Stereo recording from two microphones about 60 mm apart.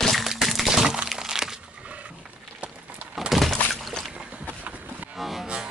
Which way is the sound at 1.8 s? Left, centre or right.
Right.